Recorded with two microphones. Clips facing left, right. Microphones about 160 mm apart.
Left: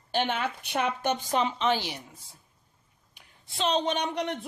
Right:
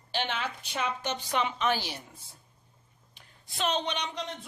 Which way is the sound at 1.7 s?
20° left (ahead or behind).